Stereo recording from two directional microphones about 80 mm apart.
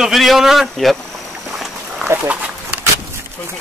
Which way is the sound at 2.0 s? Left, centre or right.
Right.